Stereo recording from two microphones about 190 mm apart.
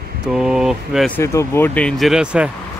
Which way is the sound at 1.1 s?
15° left (ahead or behind).